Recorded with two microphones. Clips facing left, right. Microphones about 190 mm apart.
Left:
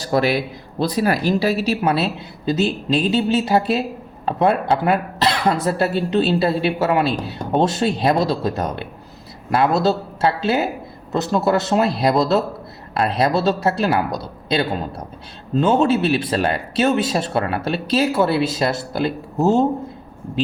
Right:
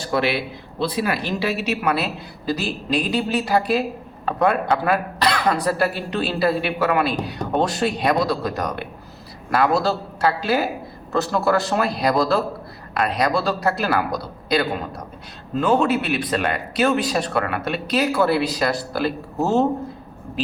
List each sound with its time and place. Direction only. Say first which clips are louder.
0.0 s speech: left 3 dB; 40° left (ahead or behind); by 19.6 s 15° left (ahead or behind)